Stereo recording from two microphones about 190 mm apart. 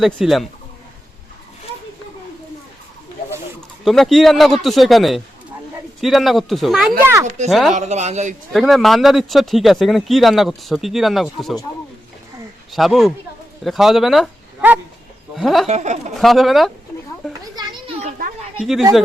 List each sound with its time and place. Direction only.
0.0 s speech: centre (ahead or behind)
3.8 s speech: centre (ahead or behind)
7.0 s speech: 15° right (ahead or behind)
7.3 s a man's voice: 35° right (ahead or behind)
8.5 s speech: centre (ahead or behind)
12.7 s speech: centre (ahead or behind)
15.6 s a man's voice: 35° right (ahead or behind)
16.1 s speech: centre (ahead or behind)
17.5 s a sound: 20° right (ahead or behind)
18.2 s a sound: 45° right (ahead or behind)